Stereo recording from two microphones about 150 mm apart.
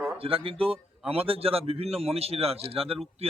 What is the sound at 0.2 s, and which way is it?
A man's voice, 40° right (ahead or behind).